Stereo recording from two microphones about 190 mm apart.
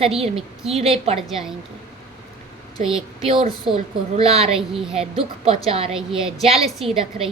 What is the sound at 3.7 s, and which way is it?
A woman's voice, 30° right (ahead or behind).